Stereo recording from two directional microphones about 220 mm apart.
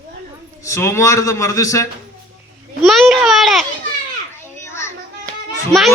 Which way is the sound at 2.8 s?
Centre (ahead or behind).